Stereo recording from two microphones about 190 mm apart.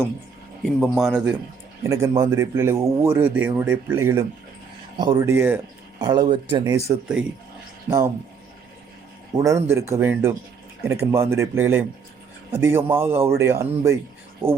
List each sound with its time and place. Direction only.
0.6 s speech: centre (ahead or behind)
1.9 s speech: 15° right (ahead or behind)
7.9 s speech: 15° right (ahead or behind)
9.3 s speech: 15° right (ahead or behind)
14.4 s speech: 30° right (ahead or behind)